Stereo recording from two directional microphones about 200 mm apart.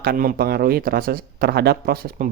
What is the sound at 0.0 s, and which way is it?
Speech, 45° right (ahead or behind).